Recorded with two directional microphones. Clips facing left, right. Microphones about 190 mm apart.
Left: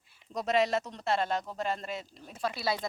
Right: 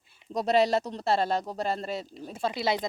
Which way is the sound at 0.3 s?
35° right (ahead or behind).